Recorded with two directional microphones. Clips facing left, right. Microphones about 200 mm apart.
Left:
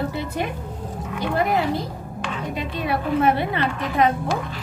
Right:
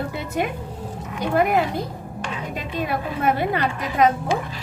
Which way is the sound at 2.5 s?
45° right (ahead or behind).